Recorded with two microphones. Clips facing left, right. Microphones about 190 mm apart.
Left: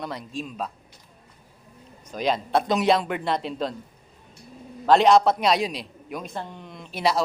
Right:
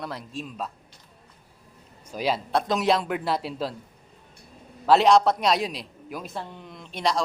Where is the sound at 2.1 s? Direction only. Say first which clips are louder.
Left 2 dB; 5° right (ahead or behind).